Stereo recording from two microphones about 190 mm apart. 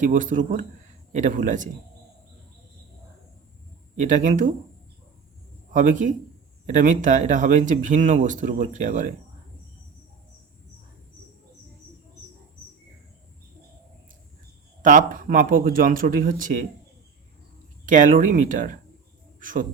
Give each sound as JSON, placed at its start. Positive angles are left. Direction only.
{"t": 0.0, "sound": "speech", "side_deg": -45}
{"t": 4.0, "sound": "speech", "side_deg": -40}
{"t": 5.7, "sound": "speech", "side_deg": -40}
{"t": 14.8, "sound": "speech", "side_deg": -45}
{"t": 17.8, "sound": "speech", "side_deg": -45}